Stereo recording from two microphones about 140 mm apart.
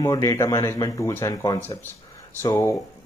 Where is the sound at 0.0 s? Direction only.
25° left (ahead or behind).